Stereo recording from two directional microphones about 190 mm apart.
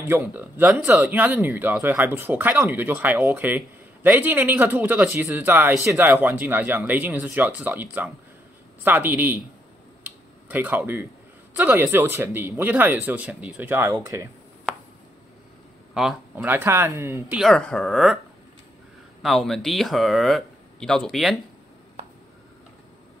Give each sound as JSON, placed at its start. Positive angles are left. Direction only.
{"t": 0.1, "sound": "speech", "side_deg": -10}
{"t": 10.0, "sound": "a sound", "side_deg": -10}
{"t": 11.5, "sound": "speech", "side_deg": -10}
{"t": 15.9, "sound": "speech", "side_deg": -5}
{"t": 17.4, "sound": "speech", "side_deg": 5}
{"t": 19.2, "sound": "speech", "side_deg": 0}